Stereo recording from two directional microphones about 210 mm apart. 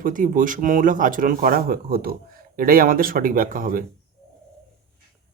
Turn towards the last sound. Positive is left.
turn(degrees=-40)  # may be behind; listen again after turning